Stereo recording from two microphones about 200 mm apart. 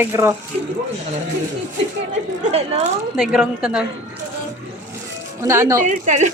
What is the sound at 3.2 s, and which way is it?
Speech, 5° right (ahead or behind).